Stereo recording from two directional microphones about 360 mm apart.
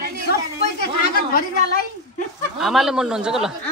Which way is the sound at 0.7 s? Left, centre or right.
Left.